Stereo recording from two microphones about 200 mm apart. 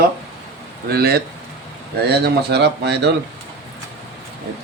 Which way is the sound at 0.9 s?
50° right (ahead or behind).